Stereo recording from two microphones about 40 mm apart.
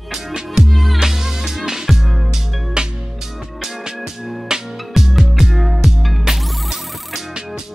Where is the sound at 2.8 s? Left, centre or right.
Right.